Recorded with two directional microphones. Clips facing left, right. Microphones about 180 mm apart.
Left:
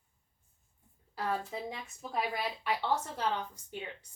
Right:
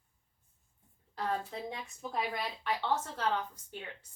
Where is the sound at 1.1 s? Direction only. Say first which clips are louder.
Even; 5° left (ahead or behind).